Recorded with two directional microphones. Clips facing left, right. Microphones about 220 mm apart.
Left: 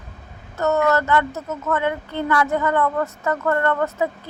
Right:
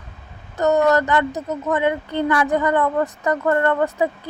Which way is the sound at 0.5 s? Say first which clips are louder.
Right 3 dB; 15° right (ahead or behind).